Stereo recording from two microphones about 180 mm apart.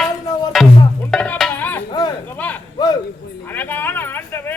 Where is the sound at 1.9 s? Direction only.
25° left (ahead or behind).